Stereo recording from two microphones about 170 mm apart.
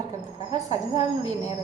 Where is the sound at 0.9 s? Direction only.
40° left (ahead or behind).